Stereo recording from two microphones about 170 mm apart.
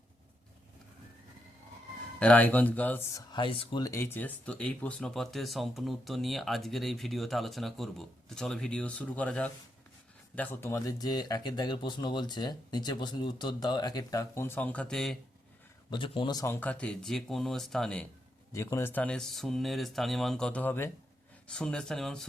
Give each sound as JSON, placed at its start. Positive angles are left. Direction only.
{"t": 2.1, "sound": "speech", "side_deg": 10}
{"t": 3.3, "sound": "speech", "side_deg": 30}
{"t": 4.0, "sound": "speech", "side_deg": 10}
{"t": 15.9, "sound": "speech", "side_deg": 30}
{"t": 16.6, "sound": "speech", "side_deg": 5}
{"t": 18.5, "sound": "speech", "side_deg": 15}